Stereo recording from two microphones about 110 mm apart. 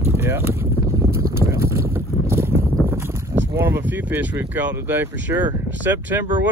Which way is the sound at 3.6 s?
20° right (ahead or behind).